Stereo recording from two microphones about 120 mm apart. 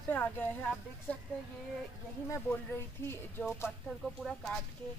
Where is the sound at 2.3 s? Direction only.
20° left (ahead or behind).